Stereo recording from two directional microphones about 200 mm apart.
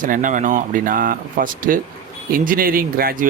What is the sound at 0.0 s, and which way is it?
Speech, 40° right (ahead or behind).